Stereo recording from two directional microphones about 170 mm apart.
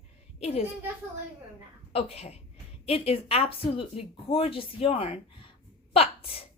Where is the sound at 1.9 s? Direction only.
35° left (ahead or behind).